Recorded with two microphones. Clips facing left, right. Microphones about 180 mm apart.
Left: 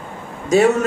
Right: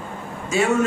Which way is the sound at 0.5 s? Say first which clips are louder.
Left 8 dB; 40° left (ahead or behind).